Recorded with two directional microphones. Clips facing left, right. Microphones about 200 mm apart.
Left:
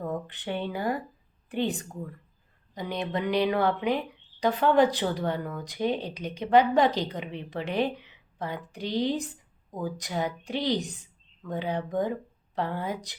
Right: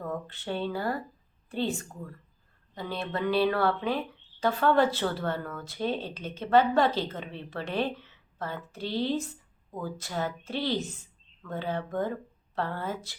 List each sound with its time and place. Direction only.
0.0 s speech: 15° left (ahead or behind)